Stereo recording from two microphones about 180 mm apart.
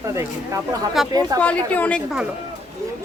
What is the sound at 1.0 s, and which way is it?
Speech, centre (ahead or behind).